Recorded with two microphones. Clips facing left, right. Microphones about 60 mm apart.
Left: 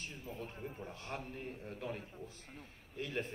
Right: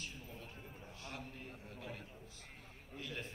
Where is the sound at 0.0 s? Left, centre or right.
Left.